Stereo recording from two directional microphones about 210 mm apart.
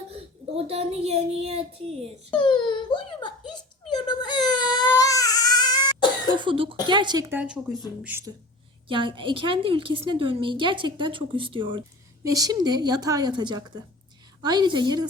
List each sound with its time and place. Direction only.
0.1 s a woman's voice: 30° right (ahead or behind)
2.3 s a sound: 25° left (ahead or behind)
6.4 s a woman's voice: 25° right (ahead or behind)
8.9 s a woman's voice: 25° right (ahead or behind)